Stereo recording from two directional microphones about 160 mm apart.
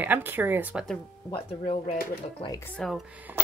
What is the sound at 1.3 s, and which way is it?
Speech, 40° left (ahead or behind).